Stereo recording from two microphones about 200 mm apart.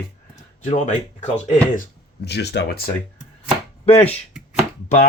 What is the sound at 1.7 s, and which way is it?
Speech, 50° left (ahead or behind).